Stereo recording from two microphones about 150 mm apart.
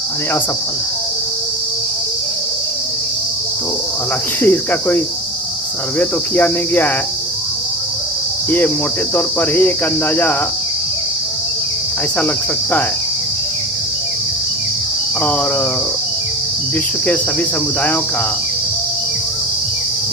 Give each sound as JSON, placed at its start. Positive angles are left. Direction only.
{"t": 4.4, "sound": "cricket", "side_deg": 10}
{"t": 8.4, "sound": "cricket", "side_deg": 10}